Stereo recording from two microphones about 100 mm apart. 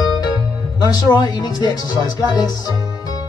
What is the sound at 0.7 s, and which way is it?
Speech, 45° left (ahead or behind).